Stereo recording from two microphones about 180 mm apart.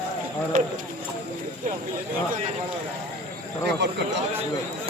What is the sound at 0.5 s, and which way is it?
Speech, 45° right (ahead or behind).